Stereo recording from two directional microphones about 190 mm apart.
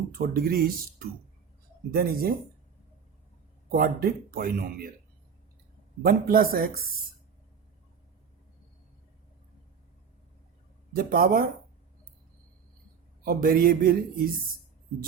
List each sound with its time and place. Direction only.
0.1 s speech: 50° right (ahead or behind)
3.7 s speech: 50° right (ahead or behind)
6.0 s speech: 50° right (ahead or behind)
10.9 s speech: 50° right (ahead or behind)
13.2 s speech: 50° right (ahead or behind)